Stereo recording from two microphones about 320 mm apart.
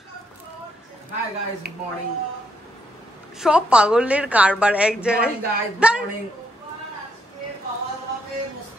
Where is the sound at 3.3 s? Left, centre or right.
Centre.